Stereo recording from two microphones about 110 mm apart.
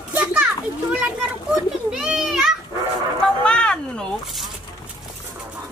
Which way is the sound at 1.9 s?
5° right (ahead or behind).